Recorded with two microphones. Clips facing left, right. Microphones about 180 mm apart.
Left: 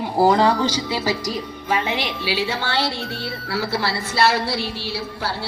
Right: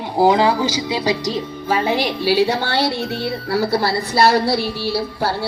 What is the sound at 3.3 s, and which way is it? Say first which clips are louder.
Music: right 6 dB; 40° right (ahead or behind).